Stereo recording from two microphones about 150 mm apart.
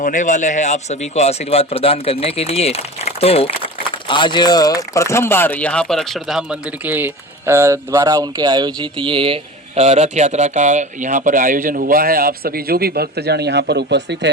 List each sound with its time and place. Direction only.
0.0 s speech: 60° left (ahead or behind); by 13.7 s 90° right